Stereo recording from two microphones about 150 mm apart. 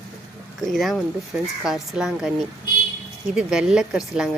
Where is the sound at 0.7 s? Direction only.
Centre (ahead or behind).